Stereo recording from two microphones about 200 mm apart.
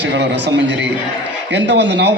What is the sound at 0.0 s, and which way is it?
A man's voice, 60° right (ahead or behind).